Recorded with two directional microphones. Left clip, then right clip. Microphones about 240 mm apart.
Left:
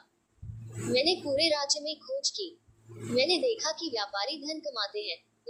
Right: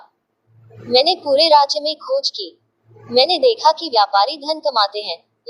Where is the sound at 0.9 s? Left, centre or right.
Centre.